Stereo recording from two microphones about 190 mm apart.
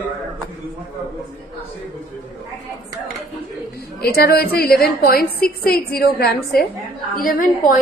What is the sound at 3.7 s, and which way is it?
A woman's voice, 55° left (ahead or behind).